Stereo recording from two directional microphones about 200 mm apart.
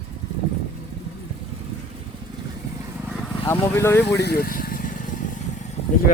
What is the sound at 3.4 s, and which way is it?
Speech, 15° left (ahead or behind).